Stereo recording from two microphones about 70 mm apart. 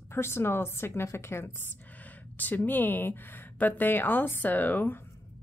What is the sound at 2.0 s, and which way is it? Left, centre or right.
Speech, left.